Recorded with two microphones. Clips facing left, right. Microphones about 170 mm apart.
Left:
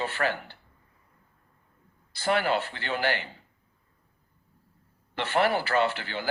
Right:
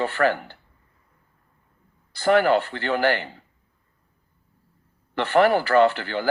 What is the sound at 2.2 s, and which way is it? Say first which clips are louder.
Speech: right 8 dB; 50° right (ahead or behind).